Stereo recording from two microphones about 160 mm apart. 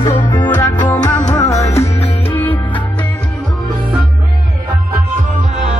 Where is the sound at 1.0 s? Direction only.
25° left (ahead or behind).